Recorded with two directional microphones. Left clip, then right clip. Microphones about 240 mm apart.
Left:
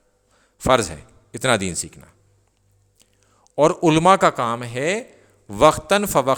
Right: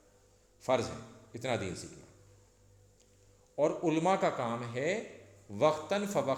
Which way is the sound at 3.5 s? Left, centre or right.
Left.